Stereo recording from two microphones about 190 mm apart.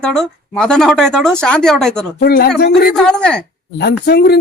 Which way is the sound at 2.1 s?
55° left (ahead or behind).